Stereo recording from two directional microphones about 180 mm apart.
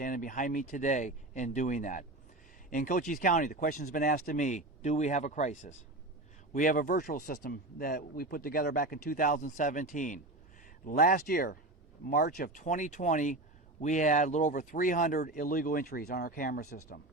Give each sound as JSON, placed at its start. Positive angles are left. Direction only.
{"t": 0.0, "sound": "speech", "side_deg": 50}